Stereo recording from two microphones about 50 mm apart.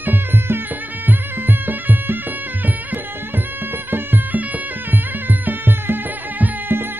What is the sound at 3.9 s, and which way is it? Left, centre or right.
Music, right.